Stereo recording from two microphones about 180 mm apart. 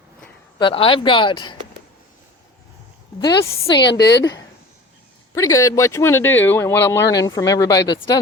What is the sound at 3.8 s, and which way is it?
Speech, 70° left (ahead or behind).